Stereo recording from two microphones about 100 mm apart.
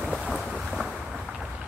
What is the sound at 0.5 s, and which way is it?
Boat, centre (ahead or behind).